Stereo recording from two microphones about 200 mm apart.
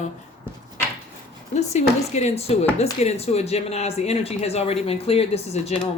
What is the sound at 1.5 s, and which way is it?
Speech, 35° left (ahead or behind).